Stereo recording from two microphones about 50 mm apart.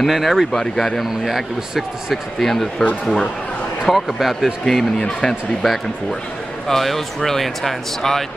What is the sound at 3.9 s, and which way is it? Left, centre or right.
Speech, centre.